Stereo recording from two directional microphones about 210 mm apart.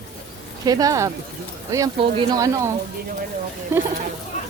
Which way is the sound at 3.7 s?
10° right (ahead or behind).